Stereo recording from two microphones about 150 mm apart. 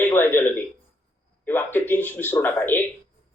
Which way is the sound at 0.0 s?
15° left (ahead or behind).